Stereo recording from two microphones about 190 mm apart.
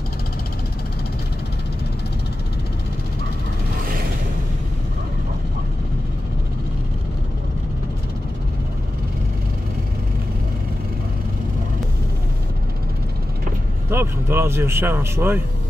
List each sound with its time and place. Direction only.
13.8 s speech: 15° right (ahead or behind)